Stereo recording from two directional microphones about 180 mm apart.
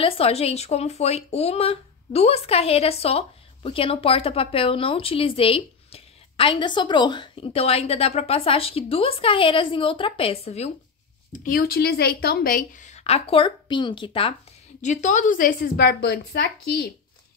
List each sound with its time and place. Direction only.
0.0 s a woman's voice: 35° left (ahead or behind)
11.3 s a woman's voice: 50° left (ahead or behind); by 14.3 s 30° left (ahead or behind)
14.8 s a woman's voice: 40° left (ahead or behind); by 16.8 s 65° left (ahead or behind)